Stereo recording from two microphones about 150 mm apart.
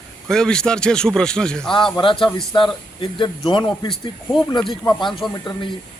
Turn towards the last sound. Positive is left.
turn(degrees=0)  # may be behind; listen again after turning